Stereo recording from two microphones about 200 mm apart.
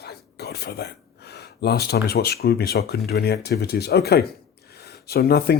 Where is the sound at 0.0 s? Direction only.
55° left (ahead or behind).